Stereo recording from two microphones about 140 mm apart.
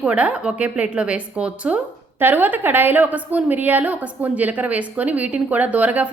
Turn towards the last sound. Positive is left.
turn(degrees=-10)  # may be behind; listen again after turning